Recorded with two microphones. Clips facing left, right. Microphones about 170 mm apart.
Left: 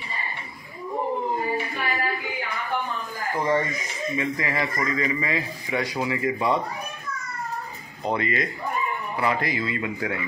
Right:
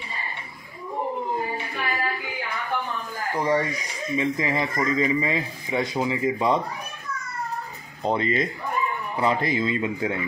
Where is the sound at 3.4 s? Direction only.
10° right (ahead or behind).